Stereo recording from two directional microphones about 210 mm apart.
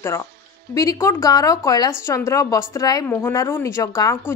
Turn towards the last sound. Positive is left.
turn(degrees=15)  # may be behind; listen again after turning